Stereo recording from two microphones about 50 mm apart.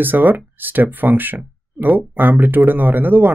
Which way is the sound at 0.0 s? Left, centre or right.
Right.